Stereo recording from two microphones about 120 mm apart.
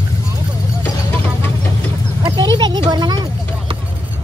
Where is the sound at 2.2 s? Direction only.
40° right (ahead or behind).